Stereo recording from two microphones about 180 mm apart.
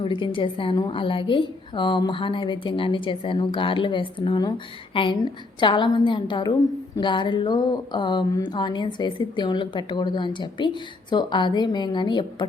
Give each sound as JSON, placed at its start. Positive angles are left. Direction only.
{"t": 0.0, "sound": "speech", "side_deg": 30}